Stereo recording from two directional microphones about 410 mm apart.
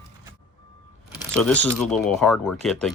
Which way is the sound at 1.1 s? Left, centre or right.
Centre.